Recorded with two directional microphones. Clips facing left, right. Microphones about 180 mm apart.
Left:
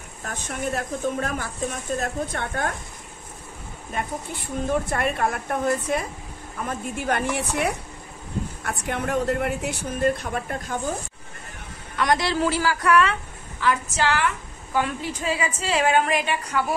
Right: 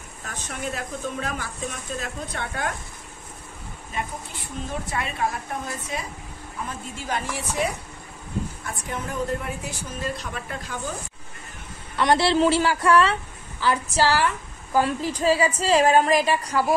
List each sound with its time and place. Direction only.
0.2 s speech: 50° left (ahead or behind)
3.9 s speech: 55° left (ahead or behind)
12.0 s a woman's voice: 30° right (ahead or behind)